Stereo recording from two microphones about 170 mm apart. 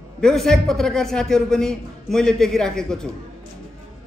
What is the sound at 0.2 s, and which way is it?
A woman's voice, centre (ahead or behind).